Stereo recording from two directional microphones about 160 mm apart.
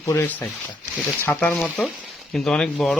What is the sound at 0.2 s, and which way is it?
Speech, 10° left (ahead or behind).